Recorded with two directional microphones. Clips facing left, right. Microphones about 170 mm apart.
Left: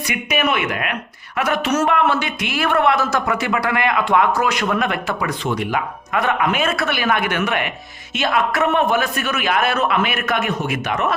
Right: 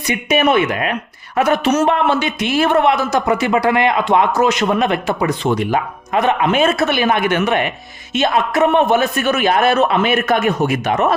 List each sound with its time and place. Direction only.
0.1 s a man's voice: 30° right (ahead or behind)